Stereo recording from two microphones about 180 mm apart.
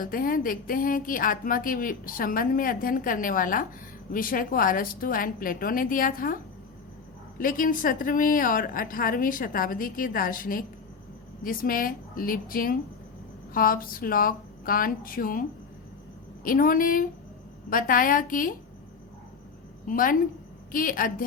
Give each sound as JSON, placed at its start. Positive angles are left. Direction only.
{"t": 0.0, "sound": "speech", "side_deg": 50}
{"t": 19.9, "sound": "speech", "side_deg": 50}